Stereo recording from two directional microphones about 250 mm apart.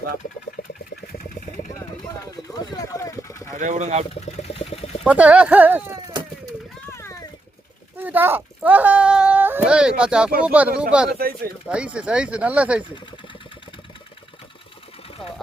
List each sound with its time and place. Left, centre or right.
2.3 s speech: centre
3.6 s speech: right
4.1 s a sound: left
5.0 s speech: centre
6.9 s a sound: centre
7.9 s speech: centre